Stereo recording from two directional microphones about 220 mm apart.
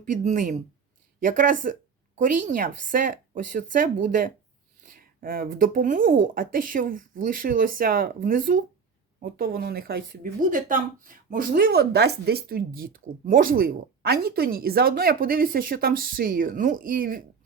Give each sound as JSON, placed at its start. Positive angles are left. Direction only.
{"t": 0.0, "sound": "speech", "side_deg": -35}